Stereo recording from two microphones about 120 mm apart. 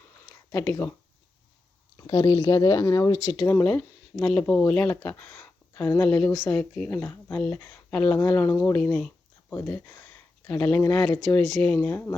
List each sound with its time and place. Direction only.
0.5 s speech: 15° left (ahead or behind)
2.0 s speech: 35° left (ahead or behind)
4.1 s speech: 5° left (ahead or behind)
5.0 s a sound: 10° left (ahead or behind)
6.0 s speech: 10° left (ahead or behind)